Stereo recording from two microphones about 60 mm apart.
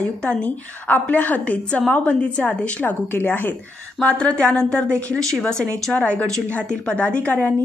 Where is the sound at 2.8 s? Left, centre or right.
Left.